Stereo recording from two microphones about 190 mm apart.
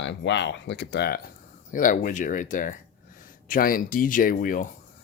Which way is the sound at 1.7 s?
45° left (ahead or behind).